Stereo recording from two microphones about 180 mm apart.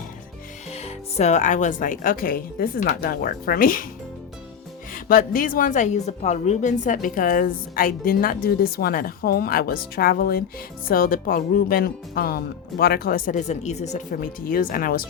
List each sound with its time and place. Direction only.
0.7 s speech: 35° left (ahead or behind); by 3.8 s 50° left (ahead or behind)
4.9 s speech: 50° left (ahead or behind)